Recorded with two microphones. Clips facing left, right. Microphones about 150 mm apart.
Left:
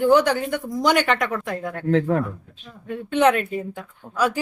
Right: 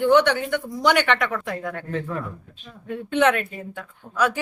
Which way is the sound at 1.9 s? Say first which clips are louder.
Left 11 dB; 70° left (ahead or behind).